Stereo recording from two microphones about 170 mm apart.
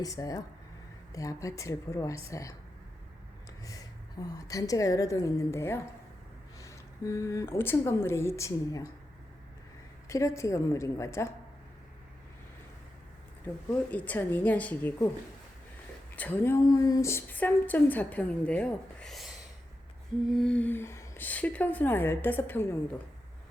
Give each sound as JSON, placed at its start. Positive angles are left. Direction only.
{"t": 0.0, "sound": "a woman's voice", "side_deg": 20}
{"t": 3.6, "sound": "a woman's voice", "side_deg": 20}
{"t": 10.1, "sound": "a woman's voice", "side_deg": 15}
{"t": 13.9, "sound": "a woman's voice", "side_deg": 10}
{"t": 16.1, "sound": "a woman's voice", "side_deg": 10}
{"t": 20.3, "sound": "a woman's voice", "side_deg": 5}